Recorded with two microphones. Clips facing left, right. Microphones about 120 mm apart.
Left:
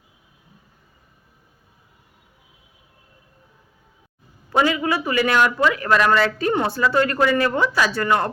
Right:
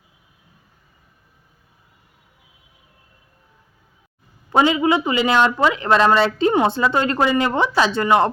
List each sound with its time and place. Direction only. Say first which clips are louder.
4.4 s a man's voice: right 3 dB; 20° right (ahead or behind)